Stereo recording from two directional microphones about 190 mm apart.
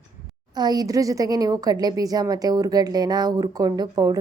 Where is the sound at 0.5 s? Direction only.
20° right (ahead or behind).